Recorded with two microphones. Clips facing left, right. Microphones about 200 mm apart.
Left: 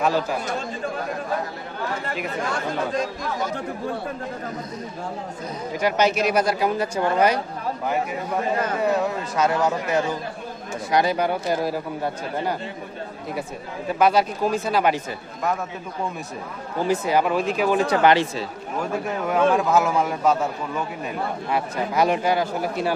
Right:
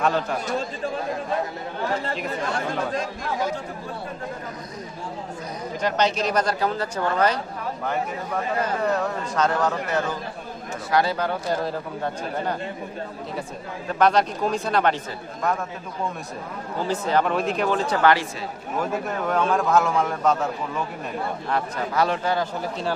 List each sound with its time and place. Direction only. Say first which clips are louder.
0.0 s a man's voice: left 1 dB; 5° left (ahead or behind)
5.8 s speech: left 2 dB; 10° left (ahead or behind)
8.8 s speech: left 2 dB; 5° left (ahead or behind)
13.8 s a man's voice: left 1 dB; 5° left (ahead or behind)
16.8 s speech: left 2 dB; 10° left (ahead or behind)
17.6 s speech: left 3 dB; 15° left (ahead or behind)
18.8 s a man's voice: even; 5° left (ahead or behind)
21.5 s speech: left 2 dB; 10° left (ahead or behind)